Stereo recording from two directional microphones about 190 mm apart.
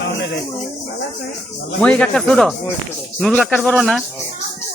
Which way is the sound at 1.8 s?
5° left (ahead or behind).